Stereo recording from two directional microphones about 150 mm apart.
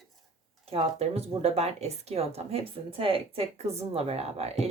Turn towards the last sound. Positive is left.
turn(degrees=-45)  # may be behind; listen again after turning